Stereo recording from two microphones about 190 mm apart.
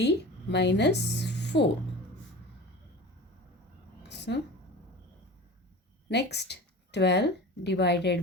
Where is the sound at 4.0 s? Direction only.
60° left (ahead or behind).